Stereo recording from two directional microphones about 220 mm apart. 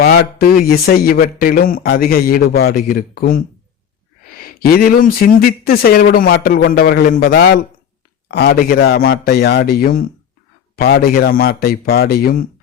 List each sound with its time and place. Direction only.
0.0 s speech: 45° left (ahead or behind)